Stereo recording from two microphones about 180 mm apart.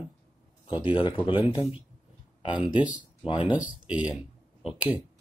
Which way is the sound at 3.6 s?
5° right (ahead or behind).